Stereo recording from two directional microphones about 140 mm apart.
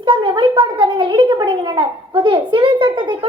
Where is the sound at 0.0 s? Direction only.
35° right (ahead or behind).